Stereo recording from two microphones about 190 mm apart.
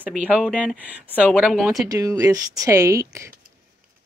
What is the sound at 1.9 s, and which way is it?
Speech, 20° right (ahead or behind).